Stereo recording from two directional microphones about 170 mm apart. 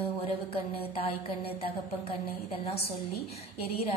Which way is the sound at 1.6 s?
35° left (ahead or behind).